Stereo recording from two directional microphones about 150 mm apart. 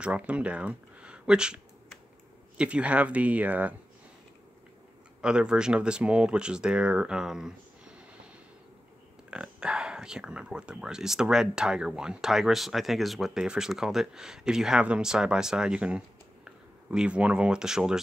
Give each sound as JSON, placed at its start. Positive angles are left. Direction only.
{"t": 0.0, "sound": "speech", "side_deg": -10}
{"t": 5.2, "sound": "speech", "side_deg": -5}
{"t": 9.3, "sound": "speech", "side_deg": -5}